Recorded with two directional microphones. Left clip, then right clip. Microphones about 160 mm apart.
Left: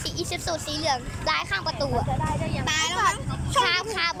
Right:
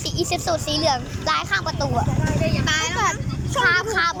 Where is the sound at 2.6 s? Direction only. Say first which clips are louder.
Right 1 dB; 20° left (ahead or behind).